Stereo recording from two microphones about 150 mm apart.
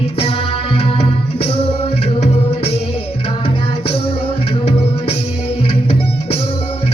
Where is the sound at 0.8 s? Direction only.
40° left (ahead or behind).